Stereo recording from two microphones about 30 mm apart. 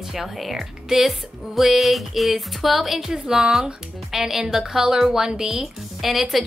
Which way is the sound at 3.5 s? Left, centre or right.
Centre.